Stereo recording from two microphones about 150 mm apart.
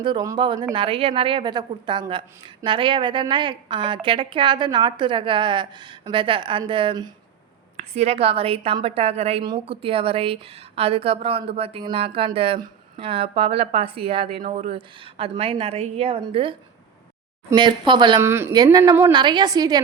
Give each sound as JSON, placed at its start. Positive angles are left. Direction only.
{"t": 0.0, "sound": "a woman's voice", "side_deg": -30}
{"t": 7.9, "sound": "a woman's voice", "side_deg": -40}
{"t": 18.2, "sound": "speech", "side_deg": -15}
{"t": 18.5, "sound": "a woman's voice", "side_deg": -25}